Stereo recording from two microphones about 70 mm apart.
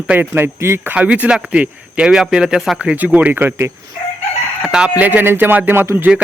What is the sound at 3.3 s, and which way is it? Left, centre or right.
Speech, right.